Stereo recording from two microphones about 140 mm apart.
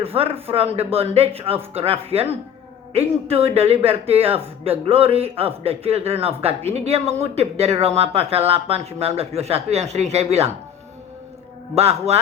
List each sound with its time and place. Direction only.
0.0 s speech: 45° right (ahead or behind)
11.7 s speech: 45° right (ahead or behind)